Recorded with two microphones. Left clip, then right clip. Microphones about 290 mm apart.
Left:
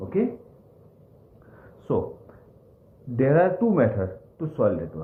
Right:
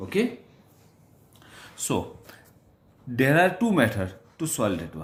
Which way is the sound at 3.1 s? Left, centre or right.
Right.